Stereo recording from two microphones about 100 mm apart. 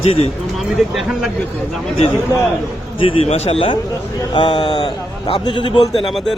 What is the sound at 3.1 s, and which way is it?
Speech, 80° left.